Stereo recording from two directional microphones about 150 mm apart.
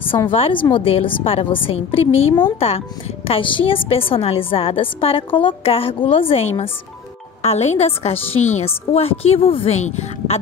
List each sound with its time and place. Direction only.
0.3 s a woman's voice: 35° left (ahead or behind)